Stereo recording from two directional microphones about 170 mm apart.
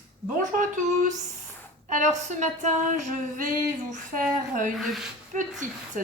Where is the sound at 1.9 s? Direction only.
45° right (ahead or behind).